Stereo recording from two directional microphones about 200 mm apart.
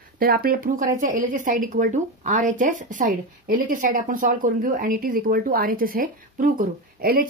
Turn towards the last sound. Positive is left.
turn(degrees=-45)  # may be behind; listen again after turning